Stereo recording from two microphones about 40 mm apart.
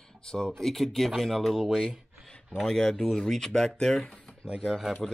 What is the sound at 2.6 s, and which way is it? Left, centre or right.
Speech, centre.